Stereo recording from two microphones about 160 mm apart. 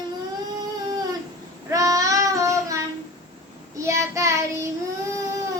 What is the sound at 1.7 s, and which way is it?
Child singing, 20° right (ahead or behind).